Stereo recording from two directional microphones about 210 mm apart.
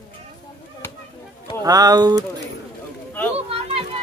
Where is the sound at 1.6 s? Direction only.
15° right (ahead or behind).